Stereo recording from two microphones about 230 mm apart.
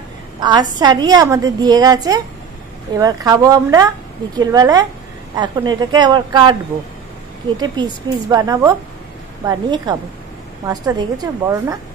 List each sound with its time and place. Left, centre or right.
0.4 s a woman's voice: centre
7.5 s a woman's voice: centre